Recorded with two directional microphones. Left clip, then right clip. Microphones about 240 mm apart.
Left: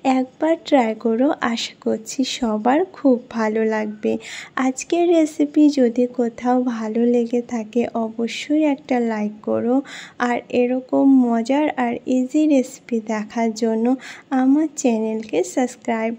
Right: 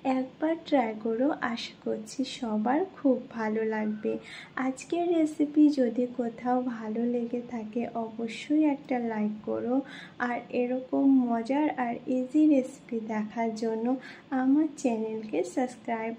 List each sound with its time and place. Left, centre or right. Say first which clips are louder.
0.0 s a woman's voice: left 10 dB; left